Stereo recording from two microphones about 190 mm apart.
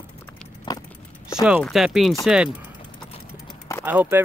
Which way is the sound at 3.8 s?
10° right (ahead or behind).